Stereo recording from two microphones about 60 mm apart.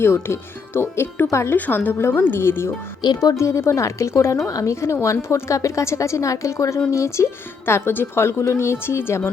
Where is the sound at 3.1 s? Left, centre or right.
Left.